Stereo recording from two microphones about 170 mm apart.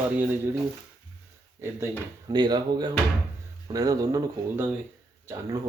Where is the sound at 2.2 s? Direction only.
25° right (ahead or behind).